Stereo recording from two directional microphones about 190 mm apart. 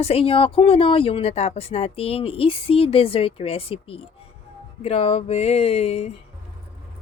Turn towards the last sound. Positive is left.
turn(degrees=30)  # may be behind; listen again after turning